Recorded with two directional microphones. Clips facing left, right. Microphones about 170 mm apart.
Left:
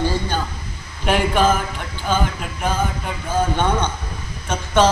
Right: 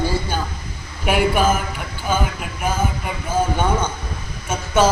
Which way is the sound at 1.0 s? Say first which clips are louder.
Even; 10° right (ahead or behind).